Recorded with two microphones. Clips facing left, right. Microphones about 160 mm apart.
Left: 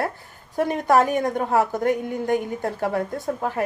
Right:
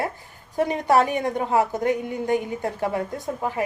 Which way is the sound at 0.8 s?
45° left (ahead or behind).